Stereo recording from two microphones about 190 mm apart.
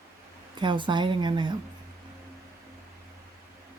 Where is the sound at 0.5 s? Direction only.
25° right (ahead or behind).